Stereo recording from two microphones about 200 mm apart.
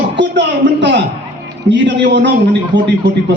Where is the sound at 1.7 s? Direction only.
60° right (ahead or behind).